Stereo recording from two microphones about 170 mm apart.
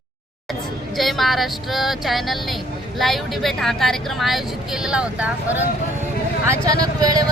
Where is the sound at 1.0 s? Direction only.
Centre (ahead or behind).